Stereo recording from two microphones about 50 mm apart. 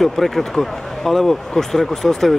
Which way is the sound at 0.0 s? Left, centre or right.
Centre.